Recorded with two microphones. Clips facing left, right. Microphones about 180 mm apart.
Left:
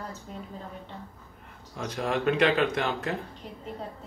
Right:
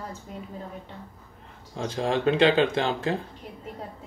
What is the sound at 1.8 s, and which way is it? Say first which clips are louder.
Speech: right 3 dB; 30° right (ahead or behind).